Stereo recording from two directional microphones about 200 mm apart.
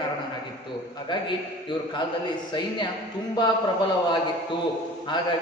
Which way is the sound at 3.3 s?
20° left (ahead or behind).